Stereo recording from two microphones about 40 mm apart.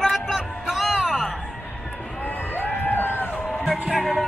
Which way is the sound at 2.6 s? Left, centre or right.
Left.